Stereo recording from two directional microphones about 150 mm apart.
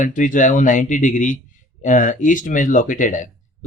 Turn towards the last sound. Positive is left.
turn(degrees=60)  # may be behind; listen again after turning